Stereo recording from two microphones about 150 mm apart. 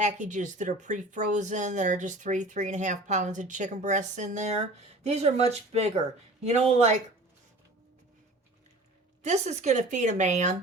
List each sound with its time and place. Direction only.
0.0 s speech: 55° right (ahead or behind)
9.2 s speech: 50° right (ahead or behind)